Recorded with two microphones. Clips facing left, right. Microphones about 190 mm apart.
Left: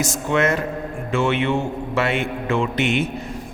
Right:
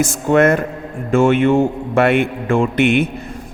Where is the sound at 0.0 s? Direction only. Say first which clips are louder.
Right 7 dB; 50° right (ahead or behind).